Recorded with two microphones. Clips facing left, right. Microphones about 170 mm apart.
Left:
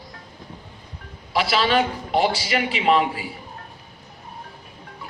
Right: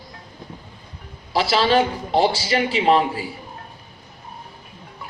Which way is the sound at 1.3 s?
30° right (ahead or behind).